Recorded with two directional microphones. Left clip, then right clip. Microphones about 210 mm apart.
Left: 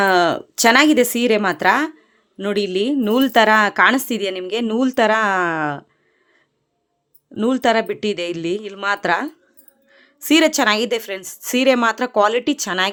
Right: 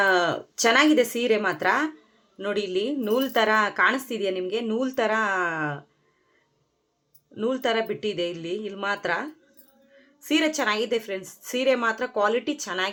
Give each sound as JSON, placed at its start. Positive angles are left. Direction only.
{"t": 0.0, "sound": "a woman's voice", "side_deg": 50}
{"t": 7.3, "sound": "a woman's voice", "side_deg": 55}